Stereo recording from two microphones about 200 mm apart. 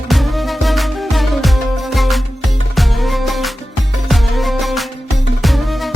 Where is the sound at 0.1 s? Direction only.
Centre (ahead or behind).